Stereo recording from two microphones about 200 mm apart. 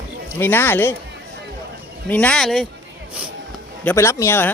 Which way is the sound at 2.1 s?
5° left (ahead or behind).